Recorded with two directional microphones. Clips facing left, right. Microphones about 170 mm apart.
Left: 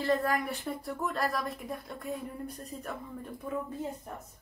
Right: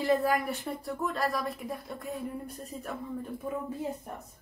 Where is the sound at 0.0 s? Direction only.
10° right (ahead or behind).